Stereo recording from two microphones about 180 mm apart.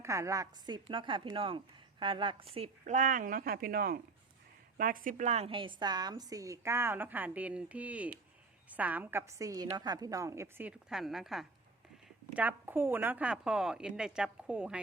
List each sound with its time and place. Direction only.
0.0 s a woman's voice: 15° right (ahead or behind)